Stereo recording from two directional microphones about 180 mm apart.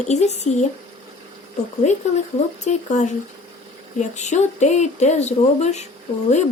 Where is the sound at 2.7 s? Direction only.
45° left (ahead or behind).